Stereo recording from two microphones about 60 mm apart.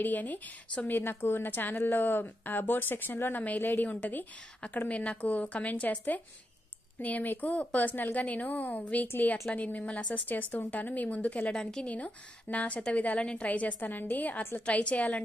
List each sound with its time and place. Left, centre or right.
0.0 s a woman's voice: left
11.5 s speech: centre
11.9 s a woman's voice: left
13.5 s a woman's voice: left